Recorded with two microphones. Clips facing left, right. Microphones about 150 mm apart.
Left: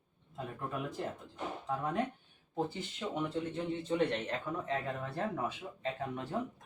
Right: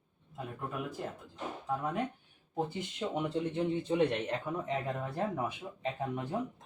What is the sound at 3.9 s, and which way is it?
Speech, 15° right (ahead or behind).